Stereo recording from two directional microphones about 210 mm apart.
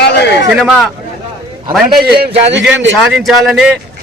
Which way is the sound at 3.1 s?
Centre (ahead or behind).